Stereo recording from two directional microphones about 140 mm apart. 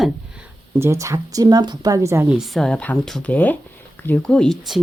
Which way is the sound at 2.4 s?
Centre (ahead or behind).